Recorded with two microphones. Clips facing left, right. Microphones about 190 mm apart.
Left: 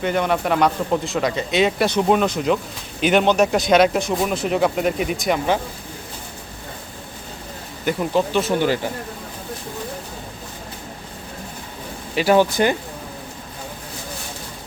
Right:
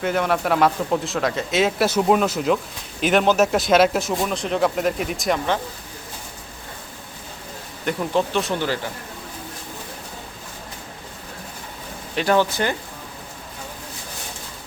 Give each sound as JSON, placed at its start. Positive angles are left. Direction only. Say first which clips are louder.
{"t": 0.0, "sound": "speech", "louder": "left 1 dB", "side_deg": 0}
{"t": 7.9, "sound": "speech", "louder": "left 2 dB", "side_deg": 0}
{"t": 8.5, "sound": "speech", "louder": "left 5 dB", "side_deg": 15}
{"t": 12.1, "sound": "speech", "louder": "left 3 dB", "side_deg": 10}